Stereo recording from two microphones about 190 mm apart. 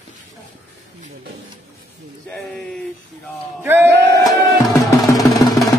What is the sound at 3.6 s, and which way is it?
Speech, 10° right (ahead or behind).